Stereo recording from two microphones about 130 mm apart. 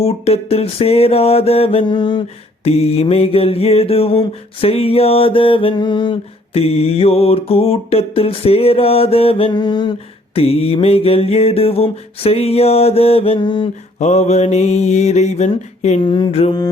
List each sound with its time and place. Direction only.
0.0 s mantra: 50° left (ahead or behind); by 2.2 s 35° left (ahead or behind)
2.6 s mantra: 50° left (ahead or behind)
9.5 s mantra: 35° left (ahead or behind)
10.3 s mantra: 50° left (ahead or behind)
14.0 s mantra: 60° left (ahead or behind)
16.0 s mantra: 40° left (ahead or behind)